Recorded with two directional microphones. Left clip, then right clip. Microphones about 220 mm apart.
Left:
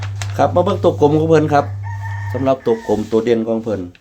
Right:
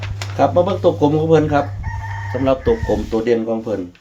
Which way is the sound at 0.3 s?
40° left (ahead or behind).